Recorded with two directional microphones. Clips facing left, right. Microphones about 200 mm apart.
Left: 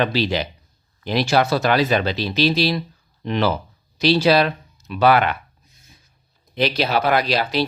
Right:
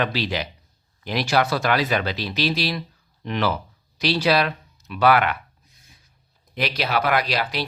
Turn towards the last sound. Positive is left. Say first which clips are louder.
# left 4 dB
turn(degrees=25)  # may be behind; listen again after turning